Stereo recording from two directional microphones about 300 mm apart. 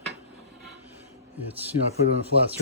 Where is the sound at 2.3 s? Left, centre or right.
Left.